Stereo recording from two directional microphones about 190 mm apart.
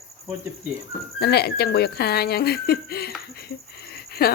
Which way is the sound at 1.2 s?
60° left (ahead or behind).